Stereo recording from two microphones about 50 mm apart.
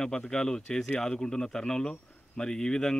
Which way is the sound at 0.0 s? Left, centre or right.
Centre.